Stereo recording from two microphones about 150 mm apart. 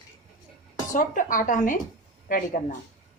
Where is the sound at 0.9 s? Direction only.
65° left (ahead or behind).